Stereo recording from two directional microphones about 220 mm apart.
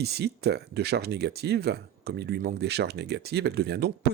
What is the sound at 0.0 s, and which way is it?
Speech, 50° right (ahead or behind).